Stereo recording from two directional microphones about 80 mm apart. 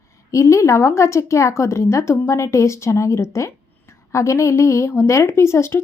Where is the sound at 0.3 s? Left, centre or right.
Left.